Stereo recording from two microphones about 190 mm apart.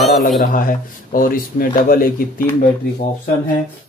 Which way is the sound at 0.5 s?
45° left (ahead or behind).